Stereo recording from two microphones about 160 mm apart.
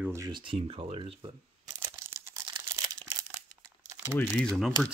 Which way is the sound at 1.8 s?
20° right (ahead or behind).